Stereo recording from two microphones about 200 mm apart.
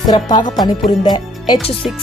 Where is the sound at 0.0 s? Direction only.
20° left (ahead or behind).